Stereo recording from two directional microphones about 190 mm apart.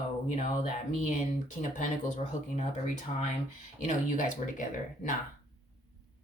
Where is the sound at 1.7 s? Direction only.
40° left (ahead or behind).